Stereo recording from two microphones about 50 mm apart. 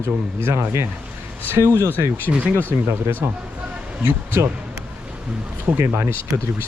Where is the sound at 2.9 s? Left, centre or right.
Right.